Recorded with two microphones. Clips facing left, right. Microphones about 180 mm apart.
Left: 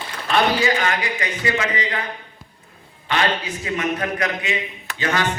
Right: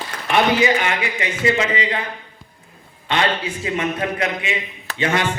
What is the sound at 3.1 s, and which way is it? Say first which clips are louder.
A man's voice: right 1 dB; 25° right (ahead or behind).